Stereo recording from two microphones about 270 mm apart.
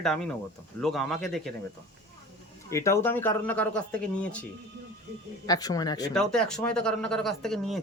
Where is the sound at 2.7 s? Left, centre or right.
Centre.